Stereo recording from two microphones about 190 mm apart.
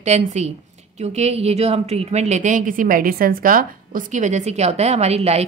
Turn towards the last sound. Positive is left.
turn(degrees=-35)  # may be behind; listen again after turning